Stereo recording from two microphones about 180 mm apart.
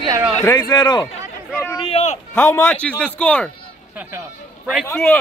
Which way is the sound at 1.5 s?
10° left (ahead or behind).